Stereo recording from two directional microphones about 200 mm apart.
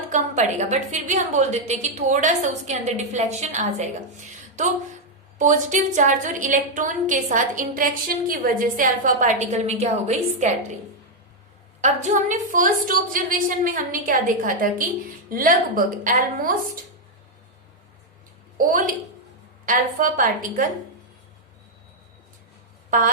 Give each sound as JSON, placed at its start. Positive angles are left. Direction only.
{"t": 0.1, "sound": "a woman's voice", "side_deg": -35}
{"t": 11.8, "sound": "a woman's voice", "side_deg": -40}
{"t": 18.5, "sound": "a woman's voice", "side_deg": -40}